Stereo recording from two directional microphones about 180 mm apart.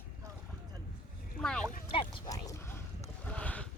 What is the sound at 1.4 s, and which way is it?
Speech, 5° left (ahead or behind).